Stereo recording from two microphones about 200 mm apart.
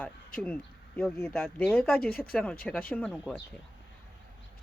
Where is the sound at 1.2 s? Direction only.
5° left (ahead or behind).